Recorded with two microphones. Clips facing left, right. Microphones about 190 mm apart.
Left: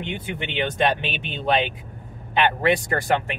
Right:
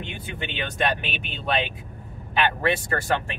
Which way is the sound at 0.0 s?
20° left (ahead or behind).